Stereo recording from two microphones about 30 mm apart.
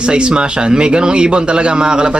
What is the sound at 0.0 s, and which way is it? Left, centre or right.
A man's voice, right.